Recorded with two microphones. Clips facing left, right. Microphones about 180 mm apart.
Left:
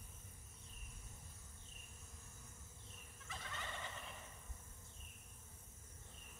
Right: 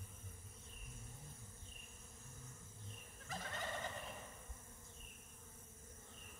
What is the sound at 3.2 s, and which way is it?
Gobble, 40° right (ahead or behind).